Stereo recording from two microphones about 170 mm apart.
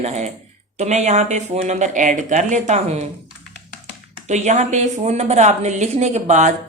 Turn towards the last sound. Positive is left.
turn(degrees=-45)  # may be behind; listen again after turning